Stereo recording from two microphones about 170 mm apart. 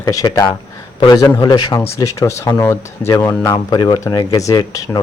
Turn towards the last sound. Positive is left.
turn(degrees=20)  # may be behind; listen again after turning